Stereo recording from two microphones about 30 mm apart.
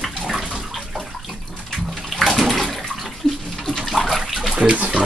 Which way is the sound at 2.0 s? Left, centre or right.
Centre.